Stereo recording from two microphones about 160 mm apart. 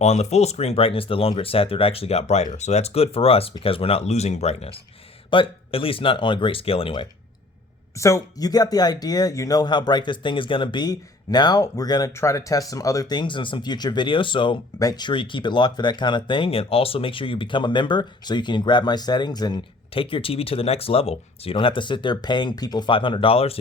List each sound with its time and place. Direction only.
0.0 s speech: 45° left (ahead or behind)
7.9 s speech: 20° left (ahead or behind); by 23.6 s 35° left (ahead or behind)